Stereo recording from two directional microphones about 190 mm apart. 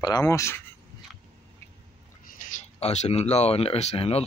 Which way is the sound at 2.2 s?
40° left (ahead or behind).